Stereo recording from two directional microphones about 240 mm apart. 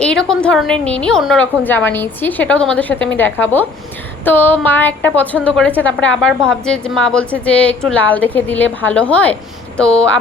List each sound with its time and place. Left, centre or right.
0.0 s a woman's voice: centre
3.4 s a sound: centre
5.5 s a woman's voice: centre